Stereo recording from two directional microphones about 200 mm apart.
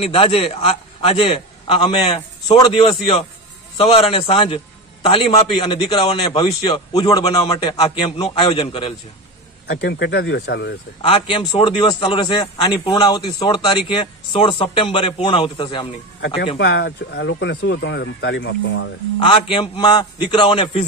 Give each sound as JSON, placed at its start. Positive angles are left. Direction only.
{"t": 0.0, "sound": "a man's voice", "side_deg": 30}
{"t": 3.7, "sound": "a man's voice", "side_deg": 30}
{"t": 9.7, "sound": "speech", "side_deg": 55}
{"t": 11.0, "sound": "a man's voice", "side_deg": 25}
{"t": 16.5, "sound": "speech", "side_deg": 60}
{"t": 19.1, "sound": "a man's voice", "side_deg": 25}